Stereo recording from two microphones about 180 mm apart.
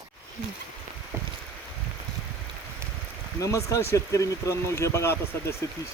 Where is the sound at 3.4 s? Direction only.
20° left (ahead or behind).